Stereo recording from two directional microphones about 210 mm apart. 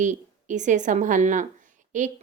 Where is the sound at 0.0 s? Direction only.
35° right (ahead or behind).